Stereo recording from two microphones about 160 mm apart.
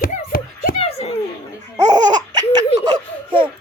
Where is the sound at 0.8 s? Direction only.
40° left (ahead or behind).